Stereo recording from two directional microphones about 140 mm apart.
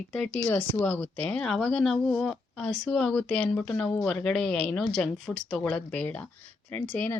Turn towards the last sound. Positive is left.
turn(degrees=15)  # may be behind; listen again after turning